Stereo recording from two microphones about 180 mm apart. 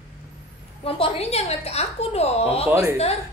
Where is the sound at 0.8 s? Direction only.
30° left (ahead or behind).